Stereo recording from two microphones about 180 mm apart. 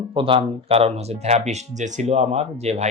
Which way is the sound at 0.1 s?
30° right (ahead or behind).